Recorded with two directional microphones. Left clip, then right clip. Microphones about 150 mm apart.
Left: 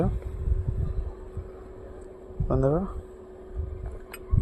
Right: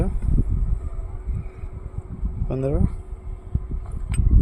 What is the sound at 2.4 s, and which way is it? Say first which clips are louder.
Speech: left 1 dB; 15° right (ahead or behind).